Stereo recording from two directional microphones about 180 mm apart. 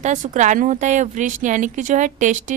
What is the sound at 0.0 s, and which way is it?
A woman's voice, 40° right (ahead or behind).